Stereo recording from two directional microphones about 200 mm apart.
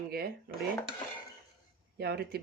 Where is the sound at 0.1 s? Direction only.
50° right (ahead or behind).